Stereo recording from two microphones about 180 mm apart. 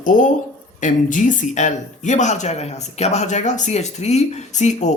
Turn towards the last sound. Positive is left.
turn(degrees=40)  # may be behind; listen again after turning